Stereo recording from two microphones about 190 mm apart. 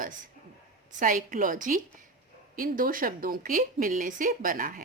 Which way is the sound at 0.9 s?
45° right (ahead or behind).